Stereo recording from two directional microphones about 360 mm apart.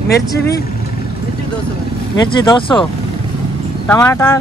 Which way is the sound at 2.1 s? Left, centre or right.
Centre.